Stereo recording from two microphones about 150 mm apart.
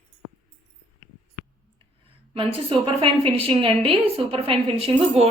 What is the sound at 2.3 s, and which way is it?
A woman's voice, 35° right (ahead or behind).